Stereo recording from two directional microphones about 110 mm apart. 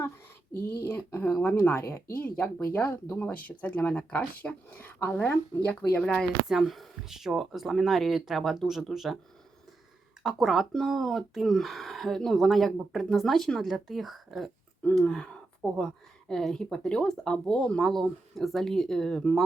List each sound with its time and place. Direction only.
0.8 s speech: 25° left (ahead or behind); by 9.1 s centre (ahead or behind)
10.2 s speech: 5° right (ahead or behind)